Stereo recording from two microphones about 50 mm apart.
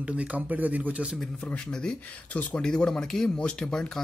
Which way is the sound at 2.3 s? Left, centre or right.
Left.